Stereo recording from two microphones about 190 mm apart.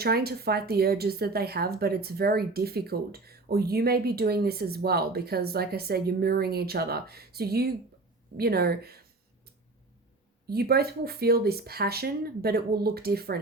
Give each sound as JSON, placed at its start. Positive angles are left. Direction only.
{"t": 0.0, "sound": "speech", "side_deg": -55}
{"t": 10.5, "sound": "speech", "side_deg": -55}